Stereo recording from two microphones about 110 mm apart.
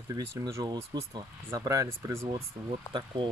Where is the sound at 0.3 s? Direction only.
25° right (ahead or behind).